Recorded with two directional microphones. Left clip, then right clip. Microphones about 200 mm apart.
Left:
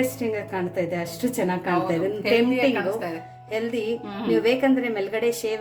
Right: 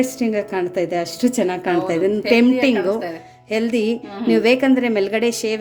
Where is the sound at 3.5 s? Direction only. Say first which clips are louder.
Right 6 dB; 55° right (ahead or behind).